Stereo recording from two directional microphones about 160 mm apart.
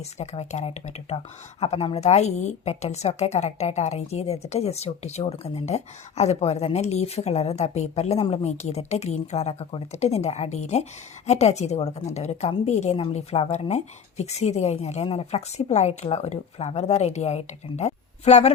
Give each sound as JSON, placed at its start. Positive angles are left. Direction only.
{"t": 0.0, "sound": "a woman's voice", "side_deg": 45}